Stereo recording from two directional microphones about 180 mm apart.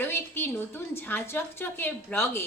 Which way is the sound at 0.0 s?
10° left (ahead or behind).